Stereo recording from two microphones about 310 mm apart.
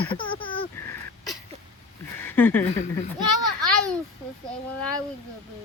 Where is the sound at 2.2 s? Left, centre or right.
Centre.